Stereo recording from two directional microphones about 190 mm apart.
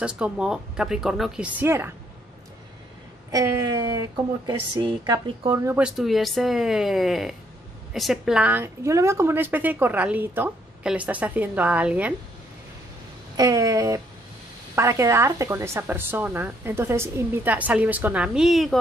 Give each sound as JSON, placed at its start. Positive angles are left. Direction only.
{"t": 0.0, "sound": "speech", "side_deg": -5}
{"t": 3.3, "sound": "speech", "side_deg": -15}
{"t": 5.8, "sound": "a woman's voice", "side_deg": -5}
{"t": 13.4, "sound": "a woman's voice", "side_deg": -20}